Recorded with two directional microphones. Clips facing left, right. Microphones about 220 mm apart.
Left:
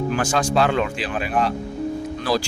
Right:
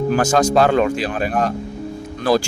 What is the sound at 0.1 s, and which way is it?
Speech, 40° right (ahead or behind).